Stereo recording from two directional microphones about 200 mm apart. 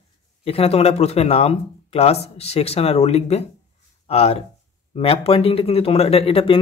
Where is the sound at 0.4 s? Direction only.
30° left (ahead or behind).